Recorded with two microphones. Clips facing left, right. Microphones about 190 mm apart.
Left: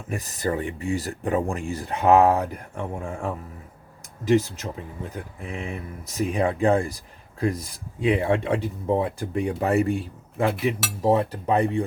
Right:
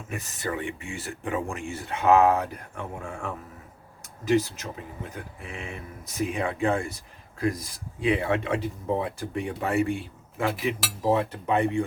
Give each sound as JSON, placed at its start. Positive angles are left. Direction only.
{"t": 0.1, "sound": "speech", "side_deg": 35}
{"t": 8.0, "sound": "speech", "side_deg": 30}
{"t": 11.0, "sound": "speech", "side_deg": 35}